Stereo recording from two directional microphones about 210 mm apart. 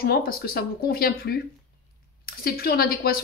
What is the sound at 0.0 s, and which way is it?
A woman's voice, 45° left (ahead or behind).